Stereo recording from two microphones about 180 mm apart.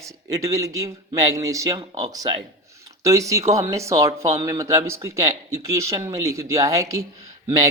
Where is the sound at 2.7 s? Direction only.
15° right (ahead or behind).